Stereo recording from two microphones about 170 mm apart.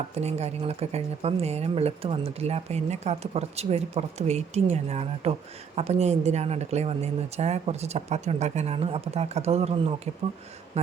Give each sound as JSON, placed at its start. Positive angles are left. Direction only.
{"t": 0.2, "sound": "speech", "side_deg": -40}